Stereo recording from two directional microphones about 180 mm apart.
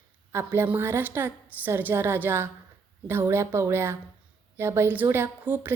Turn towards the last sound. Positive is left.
turn(degrees=-10)  # may be behind; listen again after turning